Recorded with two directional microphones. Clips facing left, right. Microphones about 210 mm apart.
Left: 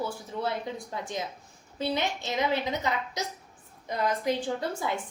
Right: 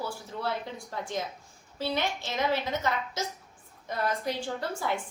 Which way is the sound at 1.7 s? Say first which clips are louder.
Left 1 dB; 20° left (ahead or behind).